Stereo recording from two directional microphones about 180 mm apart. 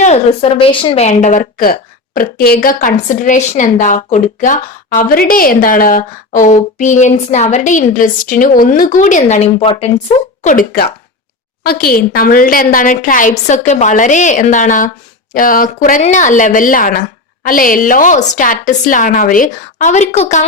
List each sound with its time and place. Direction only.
0.0 s a woman's voice: 35° left (ahead or behind)
10.4 s a woman's voice: 50° left (ahead or behind)